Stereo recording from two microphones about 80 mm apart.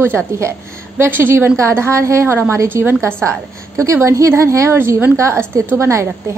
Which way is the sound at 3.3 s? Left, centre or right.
Right.